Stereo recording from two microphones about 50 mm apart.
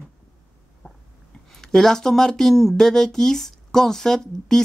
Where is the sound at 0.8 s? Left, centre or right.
Left.